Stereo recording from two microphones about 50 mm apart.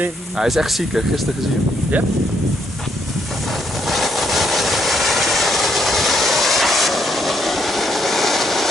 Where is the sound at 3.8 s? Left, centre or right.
Centre.